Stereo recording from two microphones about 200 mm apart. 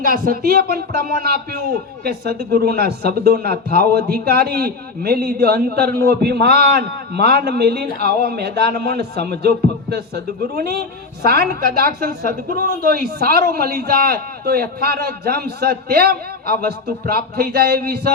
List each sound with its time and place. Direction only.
0.0 s a man's voice: 45° right (ahead or behind)